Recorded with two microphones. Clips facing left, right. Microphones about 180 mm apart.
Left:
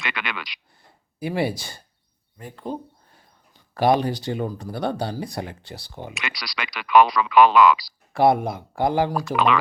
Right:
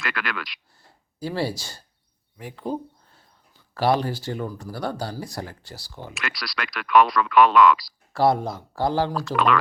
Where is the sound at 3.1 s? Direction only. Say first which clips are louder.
Left 2 dB; 15° left (ahead or behind).